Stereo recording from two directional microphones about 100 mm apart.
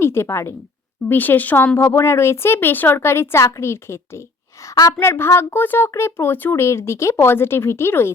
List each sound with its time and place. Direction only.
0.0 s speech: 25° left (ahead or behind)
4.6 s a woman's voice: 35° left (ahead or behind)
4.9 s speech: 25° left (ahead or behind)